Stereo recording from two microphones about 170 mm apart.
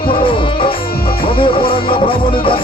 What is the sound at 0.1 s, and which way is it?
Music, 30° left (ahead or behind).